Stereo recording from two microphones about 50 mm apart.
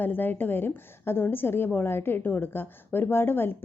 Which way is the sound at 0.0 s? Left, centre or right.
Left.